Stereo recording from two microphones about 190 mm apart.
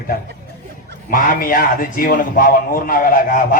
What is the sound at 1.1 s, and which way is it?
Speech, 45° left (ahead or behind).